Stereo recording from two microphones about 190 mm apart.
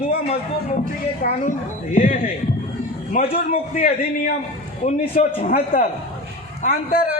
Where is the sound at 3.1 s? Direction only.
50° left (ahead or behind).